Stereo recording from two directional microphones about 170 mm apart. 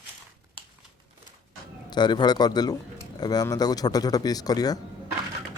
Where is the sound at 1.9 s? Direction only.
25° left (ahead or behind).